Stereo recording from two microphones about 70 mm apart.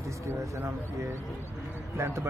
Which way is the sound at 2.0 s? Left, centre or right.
Right.